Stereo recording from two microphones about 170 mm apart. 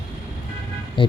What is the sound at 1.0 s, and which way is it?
Speech, 30° left (ahead or behind).